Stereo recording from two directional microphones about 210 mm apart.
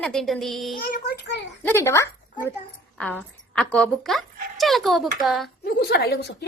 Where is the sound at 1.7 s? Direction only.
10° left (ahead or behind).